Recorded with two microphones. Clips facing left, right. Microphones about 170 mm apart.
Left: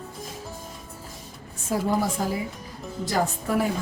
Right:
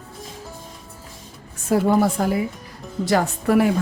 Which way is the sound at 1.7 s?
65° right (ahead or behind).